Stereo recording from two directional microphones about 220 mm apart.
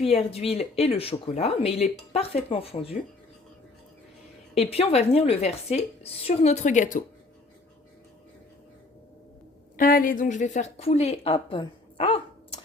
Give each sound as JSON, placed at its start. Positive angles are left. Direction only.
{"t": 0.0, "sound": "speech", "side_deg": 25}
{"t": 4.5, "sound": "speech", "side_deg": 25}
{"t": 9.7, "sound": "a woman's voice", "side_deg": 40}